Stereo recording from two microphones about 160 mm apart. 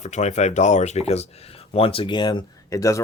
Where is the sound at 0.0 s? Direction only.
45° left (ahead or behind).